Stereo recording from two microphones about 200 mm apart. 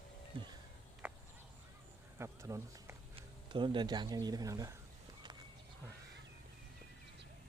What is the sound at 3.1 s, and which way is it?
Speech, 25° right (ahead or behind).